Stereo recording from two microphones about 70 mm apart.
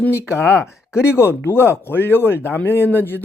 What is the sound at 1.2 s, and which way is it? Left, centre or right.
Speech, left.